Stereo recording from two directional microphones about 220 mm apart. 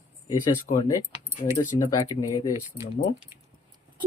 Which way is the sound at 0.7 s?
30° left (ahead or behind).